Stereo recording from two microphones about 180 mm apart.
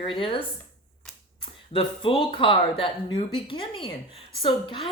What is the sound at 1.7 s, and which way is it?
A woman's voice, 30° left (ahead or behind).